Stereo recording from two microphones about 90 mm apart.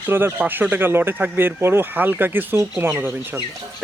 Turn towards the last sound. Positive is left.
turn(degrees=-25)  # may be behind; listen again after turning